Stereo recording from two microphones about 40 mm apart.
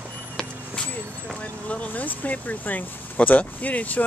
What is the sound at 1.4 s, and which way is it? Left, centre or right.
Speech, left.